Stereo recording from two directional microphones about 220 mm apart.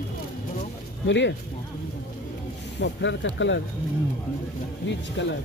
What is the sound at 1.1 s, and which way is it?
Speech, 55° left (ahead or behind).